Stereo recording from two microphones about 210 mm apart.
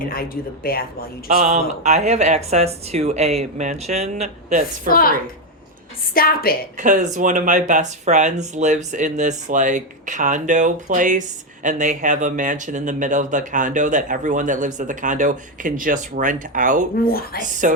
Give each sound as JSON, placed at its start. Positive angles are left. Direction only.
{"t": 0.0, "sound": "speech", "side_deg": 45}
{"t": 1.4, "sound": "speech", "side_deg": -35}
{"t": 4.9, "sound": "speech", "side_deg": 45}
{"t": 6.1, "sound": "speech", "side_deg": 45}
{"t": 6.7, "sound": "speech", "side_deg": -35}
{"t": 17.1, "sound": "speech", "side_deg": 45}
{"t": 17.6, "sound": "speech", "side_deg": -35}